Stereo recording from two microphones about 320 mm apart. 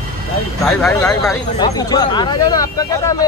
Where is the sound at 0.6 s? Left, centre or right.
Centre.